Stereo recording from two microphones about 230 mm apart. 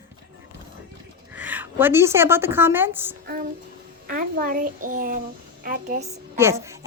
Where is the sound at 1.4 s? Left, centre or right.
Centre.